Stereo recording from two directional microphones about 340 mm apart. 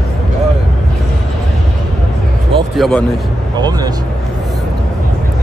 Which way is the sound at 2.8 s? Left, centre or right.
Centre.